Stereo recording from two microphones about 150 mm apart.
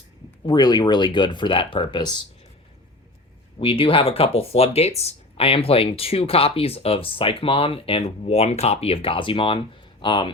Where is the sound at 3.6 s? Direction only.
35° left (ahead or behind).